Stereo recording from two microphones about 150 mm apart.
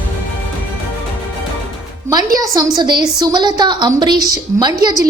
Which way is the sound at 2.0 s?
25° right (ahead or behind).